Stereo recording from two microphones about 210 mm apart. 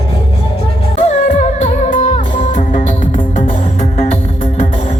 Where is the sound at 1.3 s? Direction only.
30° left (ahead or behind).